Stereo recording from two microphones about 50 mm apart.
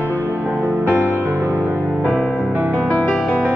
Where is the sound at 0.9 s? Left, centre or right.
Right.